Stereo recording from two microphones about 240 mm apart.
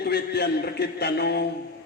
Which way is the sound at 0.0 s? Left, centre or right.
Left.